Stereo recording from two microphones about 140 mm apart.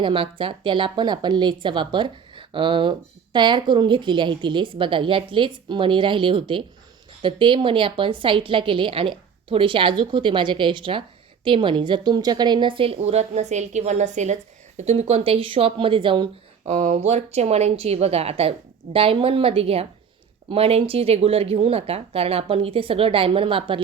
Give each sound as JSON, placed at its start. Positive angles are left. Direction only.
{"t": 0.0, "sound": "a woman's voice", "side_deg": -40}
{"t": 16.6, "sound": "speech", "side_deg": -60}